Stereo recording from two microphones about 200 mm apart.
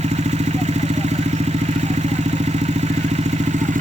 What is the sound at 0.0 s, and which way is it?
Vehicle, 35° right (ahead or behind).